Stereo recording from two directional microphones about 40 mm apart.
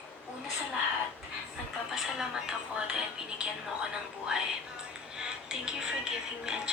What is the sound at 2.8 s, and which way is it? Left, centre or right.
Music, right.